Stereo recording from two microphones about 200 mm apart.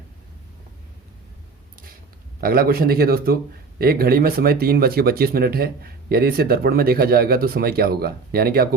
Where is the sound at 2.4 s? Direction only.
50° right (ahead or behind).